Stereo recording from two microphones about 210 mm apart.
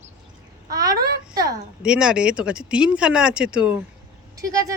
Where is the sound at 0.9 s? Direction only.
45° right (ahead or behind).